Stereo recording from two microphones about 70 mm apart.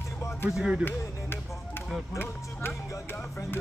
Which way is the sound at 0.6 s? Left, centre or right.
Centre.